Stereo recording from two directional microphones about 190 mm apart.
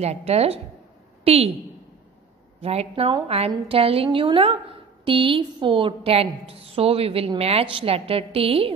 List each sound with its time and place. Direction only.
0.0 s a woman's voice: 35° right (ahead or behind)
2.6 s a woman's voice: 35° right (ahead or behind)